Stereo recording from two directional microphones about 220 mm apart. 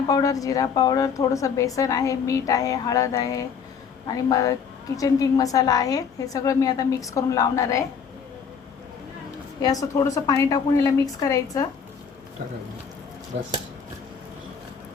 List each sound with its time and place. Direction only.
0.1 s a woman's voice: 15° left (ahead or behind)
9.6 s a woman's voice: 15° left (ahead or behind)